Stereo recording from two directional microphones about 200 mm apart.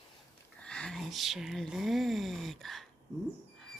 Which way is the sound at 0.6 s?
5° left (ahead or behind).